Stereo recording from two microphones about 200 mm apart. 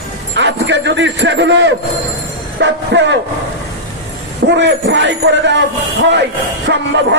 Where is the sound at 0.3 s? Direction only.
65° right (ahead or behind).